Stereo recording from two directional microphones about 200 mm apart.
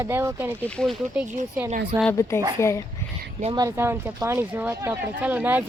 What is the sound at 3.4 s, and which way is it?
Speech, 20° right (ahead or behind).